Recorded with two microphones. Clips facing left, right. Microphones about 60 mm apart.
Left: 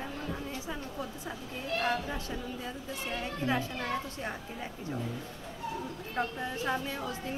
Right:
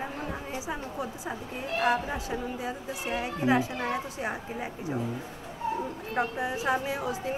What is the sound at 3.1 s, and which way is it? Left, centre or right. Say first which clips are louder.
Speech: right 6 dB; centre.